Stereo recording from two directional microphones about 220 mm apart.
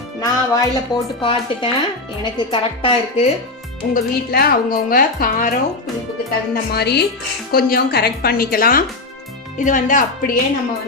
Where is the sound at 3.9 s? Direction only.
40° left (ahead or behind).